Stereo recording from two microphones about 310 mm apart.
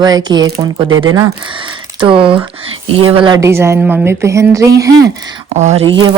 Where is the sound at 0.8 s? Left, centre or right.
Right.